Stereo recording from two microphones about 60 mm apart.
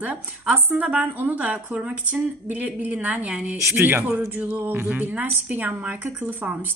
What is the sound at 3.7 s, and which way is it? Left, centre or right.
A woman's voice, right.